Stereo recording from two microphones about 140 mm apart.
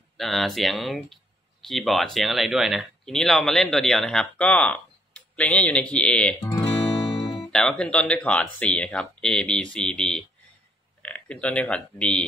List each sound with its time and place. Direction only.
0.2 s speech: centre (ahead or behind)
6.5 s guitar: 40° left (ahead or behind)
7.2 s speech: centre (ahead or behind)